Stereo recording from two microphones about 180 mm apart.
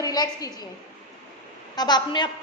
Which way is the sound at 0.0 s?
20° left (ahead or behind).